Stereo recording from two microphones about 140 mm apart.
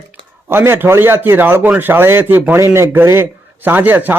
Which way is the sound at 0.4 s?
15° right (ahead or behind).